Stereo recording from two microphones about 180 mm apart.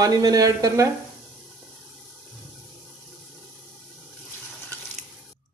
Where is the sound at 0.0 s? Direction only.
20° right (ahead or behind).